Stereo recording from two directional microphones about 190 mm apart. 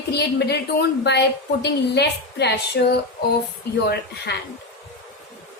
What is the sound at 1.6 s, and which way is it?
A woman's voice, 60° left (ahead or behind).